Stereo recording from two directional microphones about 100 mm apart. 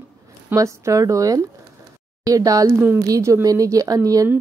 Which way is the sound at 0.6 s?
30° right (ahead or behind).